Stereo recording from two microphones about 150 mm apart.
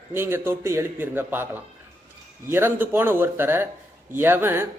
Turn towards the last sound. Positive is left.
turn(degrees=-15)  # may be behind; listen again after turning